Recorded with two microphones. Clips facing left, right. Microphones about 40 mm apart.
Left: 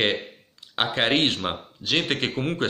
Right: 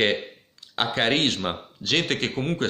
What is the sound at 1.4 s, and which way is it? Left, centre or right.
Speech, centre.